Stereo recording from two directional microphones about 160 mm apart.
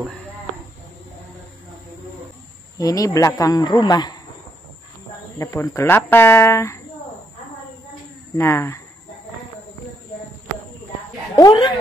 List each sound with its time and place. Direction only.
2.8 s speech: 20° left (ahead or behind)
5.4 s speech: 15° left (ahead or behind)
8.4 s speech: 15° left (ahead or behind)
11.3 s speech: 25° left (ahead or behind)